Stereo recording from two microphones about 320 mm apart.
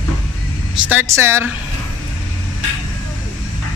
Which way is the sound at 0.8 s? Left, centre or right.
Centre.